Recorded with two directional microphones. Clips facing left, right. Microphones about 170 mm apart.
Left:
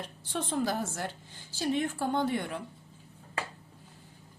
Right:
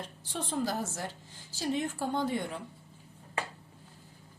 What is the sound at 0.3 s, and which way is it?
A woman's voice, 60° left (ahead or behind).